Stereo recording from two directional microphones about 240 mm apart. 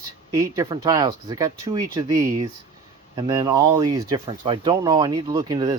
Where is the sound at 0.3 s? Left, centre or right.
Centre.